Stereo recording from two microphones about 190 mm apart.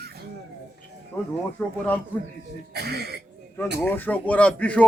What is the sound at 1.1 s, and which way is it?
Speech, 15° left (ahead or behind).